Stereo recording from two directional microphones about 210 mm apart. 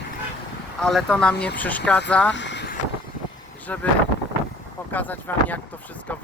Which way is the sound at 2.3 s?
60° left (ahead or behind).